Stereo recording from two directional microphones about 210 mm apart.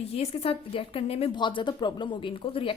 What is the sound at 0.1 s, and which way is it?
A woman's voice, 30° left (ahead or behind).